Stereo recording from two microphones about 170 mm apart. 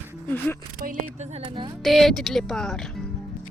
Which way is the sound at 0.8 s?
55° right (ahead or behind).